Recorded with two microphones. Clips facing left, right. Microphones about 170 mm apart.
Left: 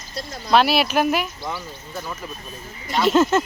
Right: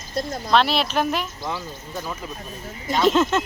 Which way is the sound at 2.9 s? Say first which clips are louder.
Left 1 dB; centre (ahead or behind).